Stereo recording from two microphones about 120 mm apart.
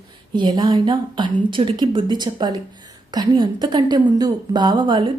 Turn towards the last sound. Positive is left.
turn(degrees=-40)  # may be behind; listen again after turning